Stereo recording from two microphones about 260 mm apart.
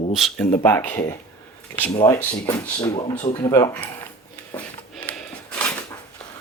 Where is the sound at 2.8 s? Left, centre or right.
Left.